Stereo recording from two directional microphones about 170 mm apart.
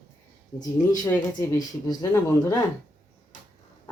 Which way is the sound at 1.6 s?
20° left (ahead or behind).